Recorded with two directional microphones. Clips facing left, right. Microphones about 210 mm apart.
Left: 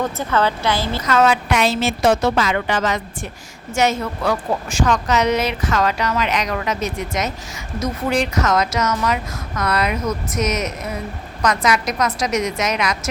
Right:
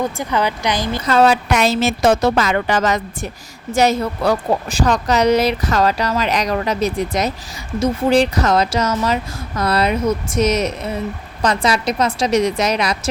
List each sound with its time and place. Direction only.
0.0 s speech: 15° right (ahead or behind)
1.0 s a woman's voice: 35° right (ahead or behind)